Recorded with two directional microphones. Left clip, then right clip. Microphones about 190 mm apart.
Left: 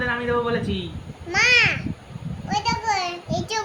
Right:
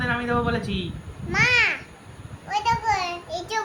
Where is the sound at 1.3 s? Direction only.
15° left (ahead or behind).